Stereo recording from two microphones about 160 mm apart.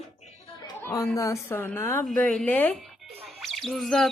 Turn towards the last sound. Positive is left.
turn(degrees=5)  # may be behind; listen again after turning